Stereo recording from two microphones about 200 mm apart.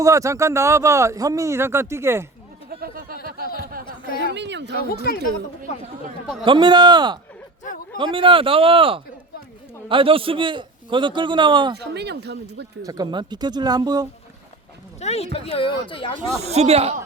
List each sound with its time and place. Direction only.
0.0 s speech: 15° right (ahead or behind)
2.6 s a sound: 50° right (ahead or behind)
4.2 s speech: 60° right (ahead or behind)
6.4 s a man's voice: 25° right (ahead or behind)
11.8 s speech: 55° right (ahead or behind)
12.8 s a man's voice: 20° right (ahead or behind)
15.0 s speech: 30° left (ahead or behind)
16.4 s speech: 30° right (ahead or behind)